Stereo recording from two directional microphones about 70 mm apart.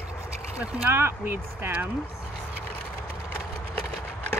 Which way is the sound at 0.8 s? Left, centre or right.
Right.